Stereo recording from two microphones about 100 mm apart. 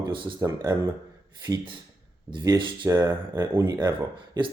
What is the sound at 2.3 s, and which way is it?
Speech, 55° right (ahead or behind).